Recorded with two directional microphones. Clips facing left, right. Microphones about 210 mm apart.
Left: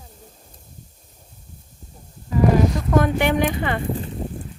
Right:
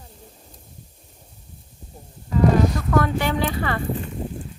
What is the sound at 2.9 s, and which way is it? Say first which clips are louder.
Speech: left 3 dB; 20° left (ahead or behind).